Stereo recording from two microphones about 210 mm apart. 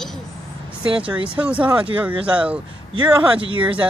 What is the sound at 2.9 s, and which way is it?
Speech, 25° right (ahead or behind).